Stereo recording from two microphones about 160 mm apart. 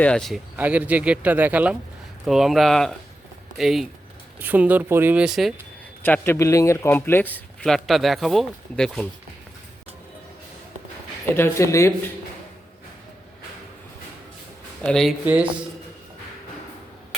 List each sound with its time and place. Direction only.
0.0 s speech: 5° left (ahead or behind)
6.1 s speech: 15° left (ahead or behind)
11.3 s speech: 15° left (ahead or behind)
14.8 s speech: 5° left (ahead or behind)